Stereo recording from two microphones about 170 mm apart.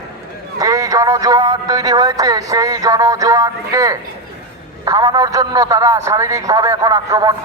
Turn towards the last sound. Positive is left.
turn(degrees=-20)  # may be behind; listen again after turning